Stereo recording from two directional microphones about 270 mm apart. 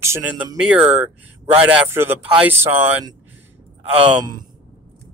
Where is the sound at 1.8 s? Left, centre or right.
Centre.